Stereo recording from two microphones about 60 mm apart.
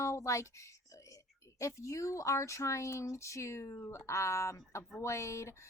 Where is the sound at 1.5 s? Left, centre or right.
Left.